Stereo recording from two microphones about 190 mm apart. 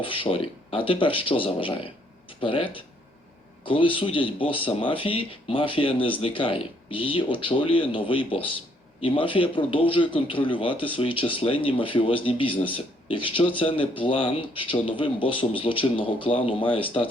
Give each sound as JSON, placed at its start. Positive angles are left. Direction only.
{"t": 0.0, "sound": "speech", "side_deg": 30}
{"t": 3.7, "sound": "speech", "side_deg": 25}